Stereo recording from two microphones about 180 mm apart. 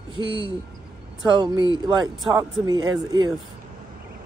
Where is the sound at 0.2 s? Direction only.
20° right (ahead or behind).